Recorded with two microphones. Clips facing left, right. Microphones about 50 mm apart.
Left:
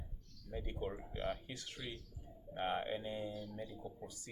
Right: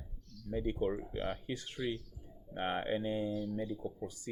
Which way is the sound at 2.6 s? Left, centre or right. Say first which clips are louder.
Right 4 dB; right.